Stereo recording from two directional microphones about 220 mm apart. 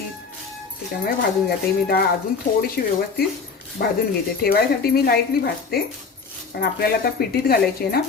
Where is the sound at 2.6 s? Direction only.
45° left (ahead or behind).